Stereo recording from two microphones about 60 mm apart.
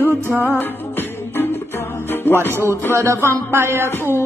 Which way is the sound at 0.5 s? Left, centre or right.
Left.